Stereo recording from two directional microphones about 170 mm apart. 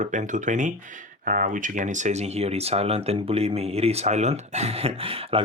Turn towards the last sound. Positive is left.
turn(degrees=-35)  # may be behind; listen again after turning